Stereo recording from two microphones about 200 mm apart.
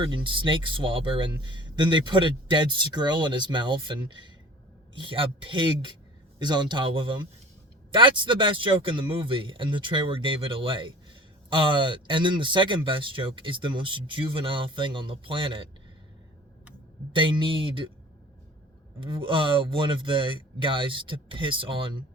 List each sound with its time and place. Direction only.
0.0 s speech: 25° right (ahead or behind)
17.1 s speech: 25° right (ahead or behind)
18.9 s speech: 25° right (ahead or behind)